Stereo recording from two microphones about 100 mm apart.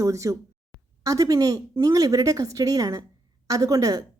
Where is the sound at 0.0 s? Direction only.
30° right (ahead or behind).